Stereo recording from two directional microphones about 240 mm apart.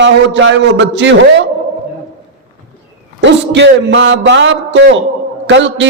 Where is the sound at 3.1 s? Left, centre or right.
Right.